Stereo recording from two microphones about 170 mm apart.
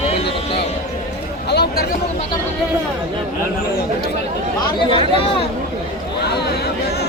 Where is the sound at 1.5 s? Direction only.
75° left (ahead or behind).